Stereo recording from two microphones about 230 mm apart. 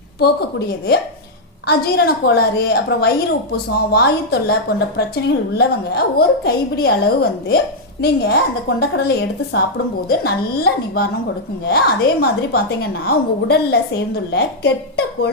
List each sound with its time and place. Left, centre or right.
1.6 s a woman's voice: left